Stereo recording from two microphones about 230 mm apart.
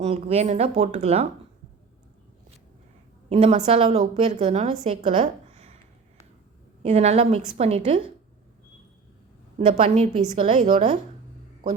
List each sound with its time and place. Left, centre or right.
0.0 s a woman's voice: right
3.2 s a woman's voice: right
5.2 s a sound: right
6.8 s a woman's voice: right
9.6 s a woman's voice: right